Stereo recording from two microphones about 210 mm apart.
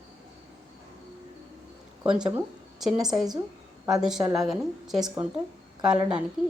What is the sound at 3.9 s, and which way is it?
A woman's voice, centre (ahead or behind).